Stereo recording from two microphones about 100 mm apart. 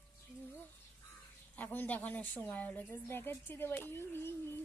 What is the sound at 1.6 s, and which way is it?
A woman's voice, 15° left (ahead or behind).